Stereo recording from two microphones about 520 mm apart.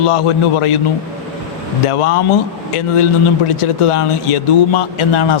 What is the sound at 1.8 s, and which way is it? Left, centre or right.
Speech, left.